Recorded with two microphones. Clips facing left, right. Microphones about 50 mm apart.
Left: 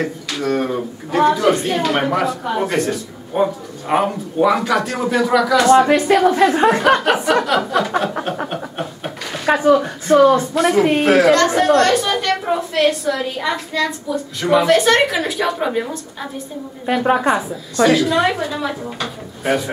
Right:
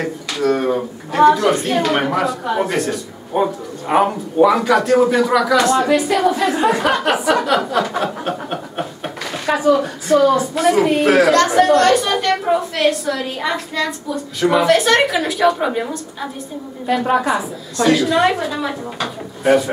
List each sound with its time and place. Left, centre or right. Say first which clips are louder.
0.0 s a woman's voice: right 2 dB; centre
6.1 s a woman's voice: left 4 dB; left
6.4 s a woman's voice: left 3 dB; centre
8.5 s a sound: right 1 dB; centre
9.6 s a woman's voice: even; centre